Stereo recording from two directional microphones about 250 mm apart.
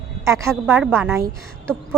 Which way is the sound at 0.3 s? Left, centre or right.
Centre.